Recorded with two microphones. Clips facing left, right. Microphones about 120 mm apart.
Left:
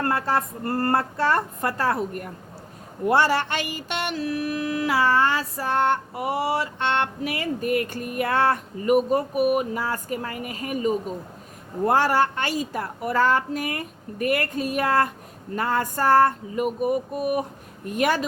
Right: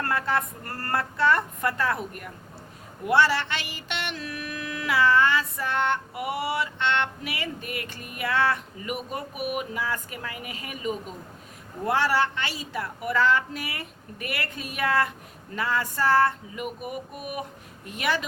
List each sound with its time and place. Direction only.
0.0 s mantra: 35° left (ahead or behind)
11.9 s a woman's voice: 45° left (ahead or behind)
15.5 s mantra: 45° left (ahead or behind)
17.8 s a woman's voice: 45° left (ahead or behind)